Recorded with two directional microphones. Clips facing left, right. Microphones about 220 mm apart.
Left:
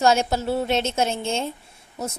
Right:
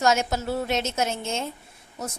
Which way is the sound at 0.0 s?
30° left (ahead or behind).